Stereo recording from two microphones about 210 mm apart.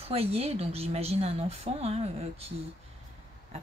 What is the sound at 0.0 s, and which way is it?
Speech, 30° right (ahead or behind).